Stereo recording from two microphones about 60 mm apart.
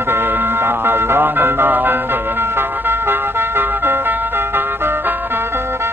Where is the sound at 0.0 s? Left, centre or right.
Right.